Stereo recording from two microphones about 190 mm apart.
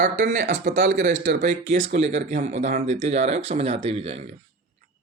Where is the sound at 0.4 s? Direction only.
65° right (ahead or behind).